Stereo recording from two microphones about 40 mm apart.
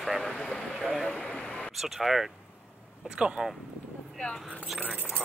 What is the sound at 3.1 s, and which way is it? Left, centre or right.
Speech, right.